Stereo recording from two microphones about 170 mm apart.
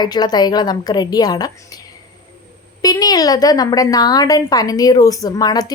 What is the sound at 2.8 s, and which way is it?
A woman's voice, 20° left (ahead or behind).